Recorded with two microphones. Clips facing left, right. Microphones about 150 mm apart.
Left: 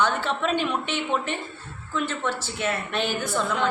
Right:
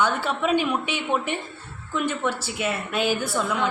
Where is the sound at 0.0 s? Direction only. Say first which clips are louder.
Right 1 dB; 10° right (ahead or behind).